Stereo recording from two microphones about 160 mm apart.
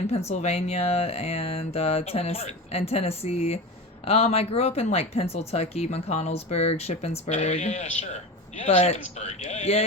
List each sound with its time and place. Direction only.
0.3 s speech: 45° left (ahead or behind)